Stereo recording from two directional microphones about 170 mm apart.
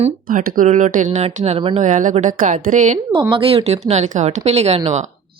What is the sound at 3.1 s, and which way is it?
Speech, 30° right (ahead or behind).